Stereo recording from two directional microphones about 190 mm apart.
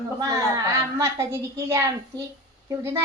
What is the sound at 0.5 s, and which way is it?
Speech, 15° right (ahead or behind).